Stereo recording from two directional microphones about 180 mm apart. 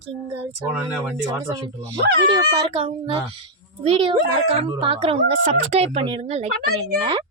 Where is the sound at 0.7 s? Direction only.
10° right (ahead or behind); by 7.2 s 25° right (ahead or behind).